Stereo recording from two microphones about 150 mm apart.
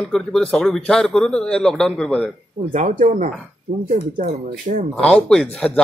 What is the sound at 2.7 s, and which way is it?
Speech, 55° right (ahead or behind).